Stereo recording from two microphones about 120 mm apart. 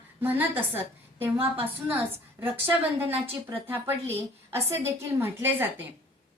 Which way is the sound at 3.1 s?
55° right (ahead or behind).